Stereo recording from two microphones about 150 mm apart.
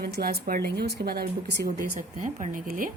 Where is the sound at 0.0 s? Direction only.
80° right.